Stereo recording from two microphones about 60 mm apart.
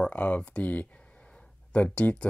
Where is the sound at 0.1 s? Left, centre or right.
Left.